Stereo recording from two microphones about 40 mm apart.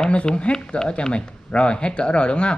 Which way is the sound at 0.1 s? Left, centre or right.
Left.